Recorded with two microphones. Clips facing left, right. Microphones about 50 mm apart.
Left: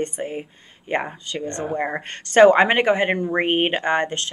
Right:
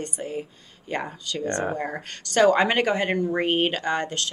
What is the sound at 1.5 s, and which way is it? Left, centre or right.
Speech, right.